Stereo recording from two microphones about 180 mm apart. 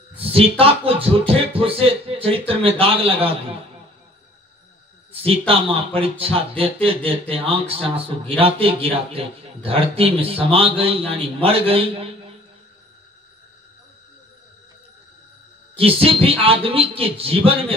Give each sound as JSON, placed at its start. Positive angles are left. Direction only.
{"t": 0.2, "sound": "speech", "side_deg": -30}
{"t": 5.5, "sound": "speech", "side_deg": -30}
{"t": 15.7, "sound": "speech", "side_deg": -30}